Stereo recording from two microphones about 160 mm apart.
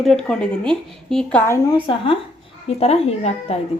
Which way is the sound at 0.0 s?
5° left (ahead or behind).